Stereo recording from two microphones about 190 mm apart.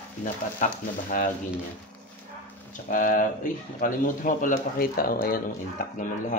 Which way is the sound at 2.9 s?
45° left (ahead or behind).